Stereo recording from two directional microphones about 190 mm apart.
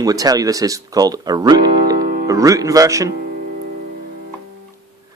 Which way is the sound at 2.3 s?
20° right (ahead or behind).